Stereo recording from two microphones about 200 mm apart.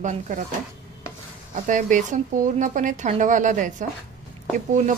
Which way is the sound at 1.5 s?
40° right (ahead or behind).